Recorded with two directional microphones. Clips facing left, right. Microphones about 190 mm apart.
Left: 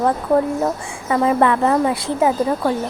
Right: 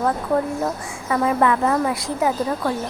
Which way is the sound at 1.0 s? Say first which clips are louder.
Left 3 dB; 30° left (ahead or behind).